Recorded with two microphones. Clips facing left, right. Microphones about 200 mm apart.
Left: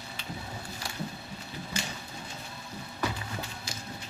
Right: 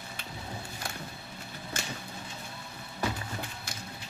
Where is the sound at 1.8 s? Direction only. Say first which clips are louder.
Left 3 dB; 50° right (ahead or behind).